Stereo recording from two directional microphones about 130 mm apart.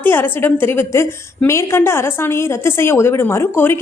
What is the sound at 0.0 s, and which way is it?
A woman's voice, 15° left (ahead or behind).